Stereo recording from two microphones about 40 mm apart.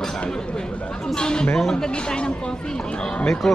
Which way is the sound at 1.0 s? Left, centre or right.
Centre.